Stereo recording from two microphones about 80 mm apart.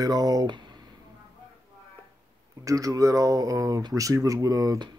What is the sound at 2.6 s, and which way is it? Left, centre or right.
Speech, right.